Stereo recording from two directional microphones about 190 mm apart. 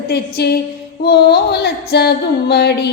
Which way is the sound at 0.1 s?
55° left (ahead or behind).